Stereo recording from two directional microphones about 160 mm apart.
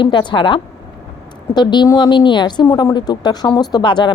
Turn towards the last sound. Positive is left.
turn(degrees=30)  # may be behind; listen again after turning